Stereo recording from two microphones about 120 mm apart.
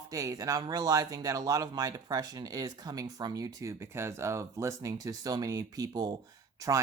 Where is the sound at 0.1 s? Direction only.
25° right (ahead or behind).